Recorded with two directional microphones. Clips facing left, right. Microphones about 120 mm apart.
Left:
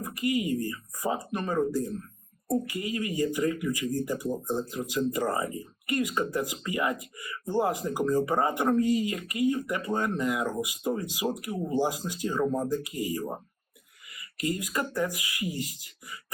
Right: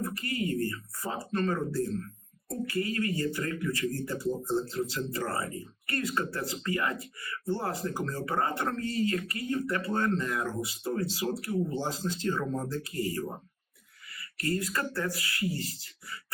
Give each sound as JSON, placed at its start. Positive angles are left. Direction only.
{"t": 0.0, "sound": "speech", "side_deg": 15}